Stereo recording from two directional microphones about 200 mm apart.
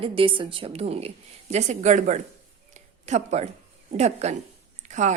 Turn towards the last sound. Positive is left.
turn(degrees=-35)  # may be behind; listen again after turning